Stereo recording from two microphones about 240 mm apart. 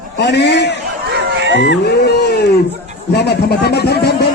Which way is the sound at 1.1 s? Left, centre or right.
Right.